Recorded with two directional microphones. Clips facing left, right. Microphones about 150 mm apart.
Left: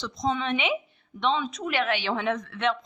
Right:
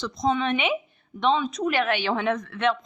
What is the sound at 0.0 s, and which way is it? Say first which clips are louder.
A man's voice: right 4 dB; 55° right (ahead or behind).